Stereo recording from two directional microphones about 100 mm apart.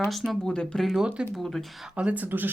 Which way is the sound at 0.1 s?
Centre (ahead or behind).